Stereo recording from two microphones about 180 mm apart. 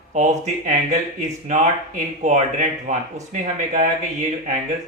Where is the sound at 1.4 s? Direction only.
45° right (ahead or behind).